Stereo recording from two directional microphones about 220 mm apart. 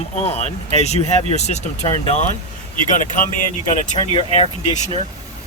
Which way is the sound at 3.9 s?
30° left (ahead or behind).